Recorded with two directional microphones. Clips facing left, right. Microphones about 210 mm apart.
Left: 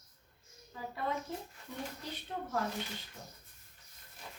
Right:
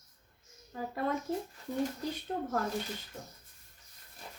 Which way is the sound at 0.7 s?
45° right (ahead or behind).